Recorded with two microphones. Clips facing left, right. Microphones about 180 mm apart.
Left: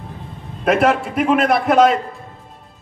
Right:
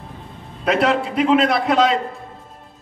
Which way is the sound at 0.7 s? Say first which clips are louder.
Left 2 dB; 55° left (ahead or behind).